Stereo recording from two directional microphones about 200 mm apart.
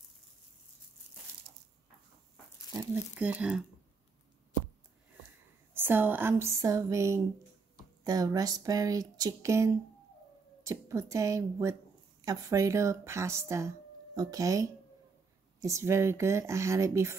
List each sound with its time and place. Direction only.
2.7 s speech: 10° right (ahead or behind)
5.7 s speech: 10° right (ahead or behind)